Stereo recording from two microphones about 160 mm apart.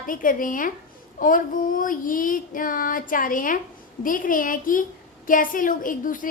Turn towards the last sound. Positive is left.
turn(degrees=55)  # may be behind; listen again after turning